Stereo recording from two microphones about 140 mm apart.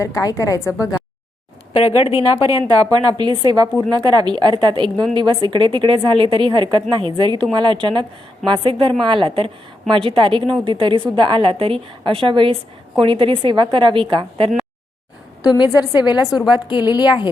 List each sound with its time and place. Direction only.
0.0 s a woman's voice: 25° left (ahead or behind)
1.7 s a woman's voice: 45° left (ahead or behind)
2.5 s a woman's voice: 25° right (ahead or behind)
15.4 s a woman's voice: 30° left (ahead or behind)